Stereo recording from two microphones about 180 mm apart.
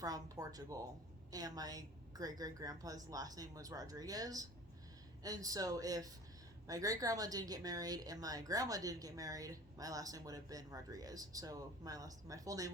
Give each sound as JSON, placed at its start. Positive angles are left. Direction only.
{"t": 0.0, "sound": "speech", "side_deg": -20}